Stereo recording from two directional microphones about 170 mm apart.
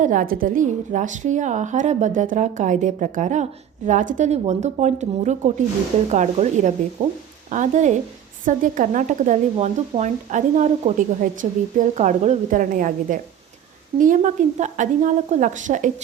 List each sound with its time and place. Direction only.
0.0 s speech: 50° right (ahead or behind)